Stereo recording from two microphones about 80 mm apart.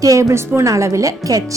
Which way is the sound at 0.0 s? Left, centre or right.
Right.